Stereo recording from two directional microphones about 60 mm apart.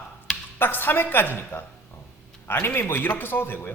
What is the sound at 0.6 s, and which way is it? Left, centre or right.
A man's voice, left.